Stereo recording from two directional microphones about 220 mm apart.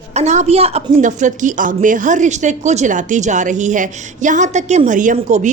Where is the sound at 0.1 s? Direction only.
30° right (ahead or behind).